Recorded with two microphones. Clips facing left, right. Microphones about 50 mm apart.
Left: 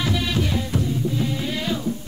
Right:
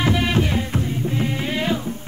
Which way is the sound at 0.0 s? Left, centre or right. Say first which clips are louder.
Right 4 dB; right.